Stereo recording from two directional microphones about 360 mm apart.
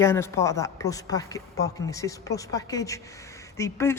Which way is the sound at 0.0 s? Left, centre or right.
Centre.